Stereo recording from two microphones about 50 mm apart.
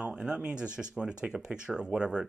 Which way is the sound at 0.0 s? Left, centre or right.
Centre.